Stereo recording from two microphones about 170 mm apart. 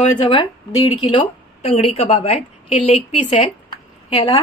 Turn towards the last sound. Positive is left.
turn(degrees=30)  # may be behind; listen again after turning